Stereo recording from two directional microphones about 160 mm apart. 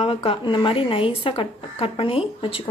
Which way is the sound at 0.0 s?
40° left (ahead or behind).